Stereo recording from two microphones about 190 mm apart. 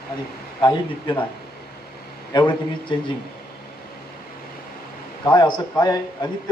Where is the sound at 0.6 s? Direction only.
25° left (ahead or behind).